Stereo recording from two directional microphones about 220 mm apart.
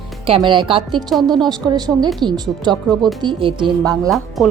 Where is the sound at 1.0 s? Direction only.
Centre (ahead or behind).